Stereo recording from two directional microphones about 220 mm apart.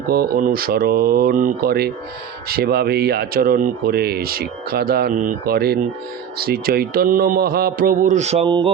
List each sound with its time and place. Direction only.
0.1 s speech: 40° right (ahead or behind); by 8.7 s 20° right (ahead or behind)